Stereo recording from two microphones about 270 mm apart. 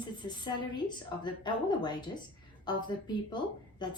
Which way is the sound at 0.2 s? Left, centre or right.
Centre.